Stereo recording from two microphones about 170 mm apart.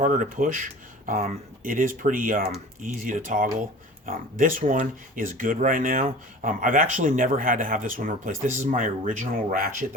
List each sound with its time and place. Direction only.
0.0 s speech: 50° right (ahead or behind)